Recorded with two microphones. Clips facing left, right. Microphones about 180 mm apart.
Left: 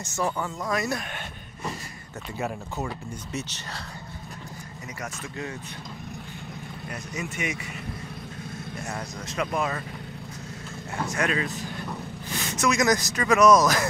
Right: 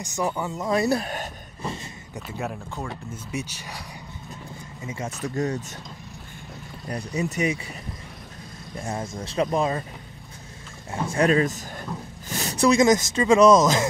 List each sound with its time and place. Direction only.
0.0 s speech: 15° right (ahead or behind)
0.7 s a sound: 30° right (ahead or behind)
2.3 s speech: centre (ahead or behind)
3.3 s speech: 10° right (ahead or behind)
5.2 s speech: 40° right (ahead or behind)
6.9 s speech: 35° right (ahead or behind)
8.8 s speech: 30° right (ahead or behind)
11.0 s speech: 30° right (ahead or behind)